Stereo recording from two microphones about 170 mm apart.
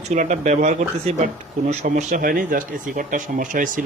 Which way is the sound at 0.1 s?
45° right (ahead or behind).